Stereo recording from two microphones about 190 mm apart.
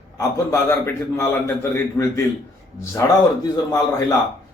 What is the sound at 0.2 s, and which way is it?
A man's voice, 15° left (ahead or behind).